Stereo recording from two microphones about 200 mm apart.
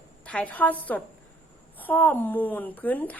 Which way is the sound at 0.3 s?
5° left (ahead or behind).